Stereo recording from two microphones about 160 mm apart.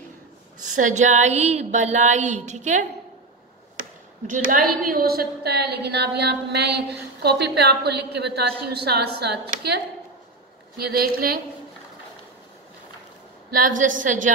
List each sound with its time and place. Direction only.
0.6 s a sound: 55° right (ahead or behind)
4.3 s a woman's voice: 60° right (ahead or behind); by 9.8 s 90° right
10.8 s a woman's voice: 75° right (ahead or behind)
13.7 s a woman's voice: 55° right (ahead or behind)